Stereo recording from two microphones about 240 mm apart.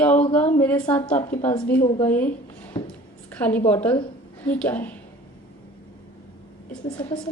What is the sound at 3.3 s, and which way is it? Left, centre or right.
A woman's voice, centre.